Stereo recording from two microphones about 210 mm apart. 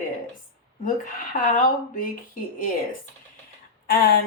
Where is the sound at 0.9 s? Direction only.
40° left (ahead or behind).